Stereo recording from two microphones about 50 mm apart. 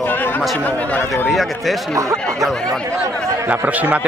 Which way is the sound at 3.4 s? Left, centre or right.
Right.